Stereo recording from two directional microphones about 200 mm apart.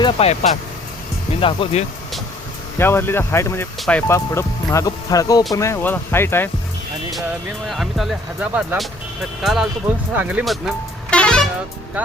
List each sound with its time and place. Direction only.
0.0 s speech: 30° left (ahead or behind)
1.4 s speech: 25° left (ahead or behind)
2.7 s speech: 10° left (ahead or behind)
7.7 s speech: centre (ahead or behind)
12.0 s speech: 10° right (ahead or behind)